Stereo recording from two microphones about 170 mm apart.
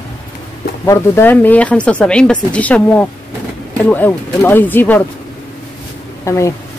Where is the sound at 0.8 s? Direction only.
15° left (ahead or behind).